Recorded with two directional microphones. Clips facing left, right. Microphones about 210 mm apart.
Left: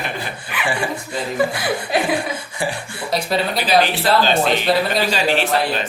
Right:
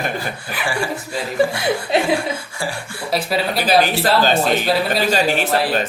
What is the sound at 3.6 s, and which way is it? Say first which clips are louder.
Speech: right 1 dB; 45° right (ahead or behind).